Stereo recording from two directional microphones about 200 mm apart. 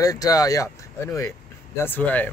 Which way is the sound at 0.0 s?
20° left (ahead or behind).